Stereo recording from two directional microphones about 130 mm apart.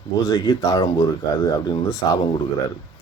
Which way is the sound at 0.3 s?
25° left (ahead or behind).